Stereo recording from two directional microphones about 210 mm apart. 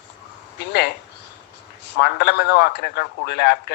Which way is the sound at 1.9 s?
55° left (ahead or behind).